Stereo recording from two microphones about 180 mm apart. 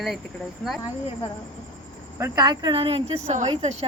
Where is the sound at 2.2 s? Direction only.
20° right (ahead or behind); by 3.7 s 35° right (ahead or behind).